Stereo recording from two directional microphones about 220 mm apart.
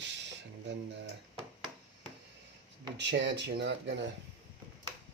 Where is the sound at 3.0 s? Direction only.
55° right (ahead or behind).